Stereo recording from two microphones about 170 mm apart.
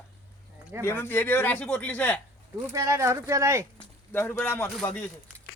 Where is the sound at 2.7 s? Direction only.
20° right (ahead or behind).